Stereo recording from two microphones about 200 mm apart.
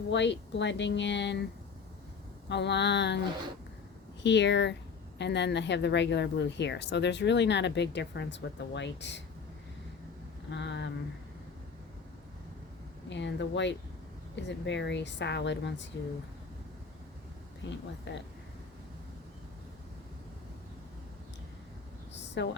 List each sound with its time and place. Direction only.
0.1 s speech: 60° left (ahead or behind)
2.5 s speech: 60° left (ahead or behind)
4.2 s speech: 60° left (ahead or behind)
10.5 s speech: 60° left (ahead or behind)
13.1 s speech: 60° left (ahead or behind)
17.6 s speech: 65° left (ahead or behind)
22.4 s speech: 65° left (ahead or behind)